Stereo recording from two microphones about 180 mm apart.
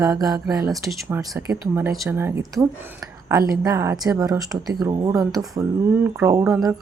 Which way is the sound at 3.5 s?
15° right (ahead or behind).